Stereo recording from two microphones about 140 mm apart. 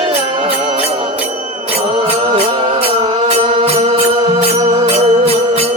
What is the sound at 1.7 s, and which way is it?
Mantra, 45° right (ahead or behind).